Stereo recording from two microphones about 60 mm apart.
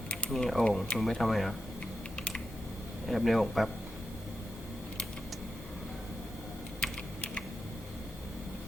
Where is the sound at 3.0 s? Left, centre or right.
Centre.